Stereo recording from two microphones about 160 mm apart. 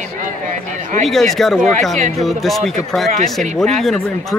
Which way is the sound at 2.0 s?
45° right (ahead or behind).